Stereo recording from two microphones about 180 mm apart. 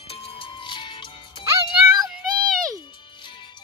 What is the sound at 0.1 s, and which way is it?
Music, 30° left (ahead or behind).